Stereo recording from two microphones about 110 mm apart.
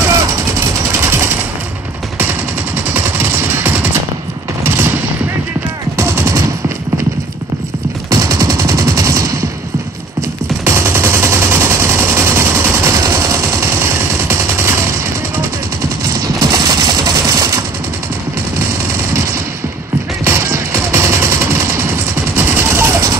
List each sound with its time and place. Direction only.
0.1 s jackhammer: 30° right (ahead or behind)
2.9 s machine gun: 20° right (ahead or behind)
4.6 s fusillade: 20° right (ahead or behind)
5.9 s machine gun: 25° right (ahead or behind)
8.1 s machine gun: 35° right (ahead or behind)
10.6 s machine gun: 25° right (ahead or behind)
16.1 s a sound: 35° right (ahead or behind)
20.2 s music: 25° right (ahead or behind)